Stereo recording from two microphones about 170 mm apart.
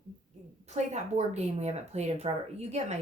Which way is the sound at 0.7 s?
40° right (ahead or behind).